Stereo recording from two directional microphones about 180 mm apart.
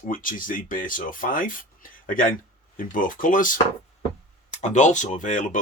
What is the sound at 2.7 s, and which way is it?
Speech, 50° left (ahead or behind).